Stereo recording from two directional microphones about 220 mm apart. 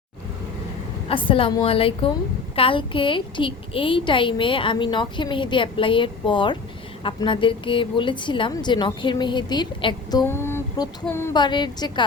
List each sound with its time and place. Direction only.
1.0 s a woman's voice: 25° left (ahead or behind)